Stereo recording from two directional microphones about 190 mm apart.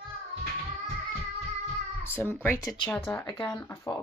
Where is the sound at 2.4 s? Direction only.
15° left (ahead or behind).